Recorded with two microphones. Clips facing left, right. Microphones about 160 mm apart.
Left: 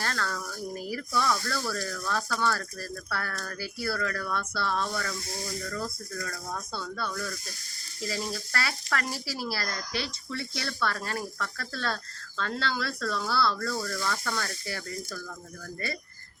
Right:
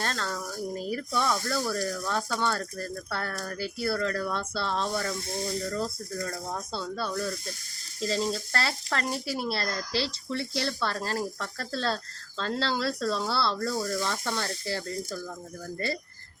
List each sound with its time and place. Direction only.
0.0 s speech: 20° right (ahead or behind)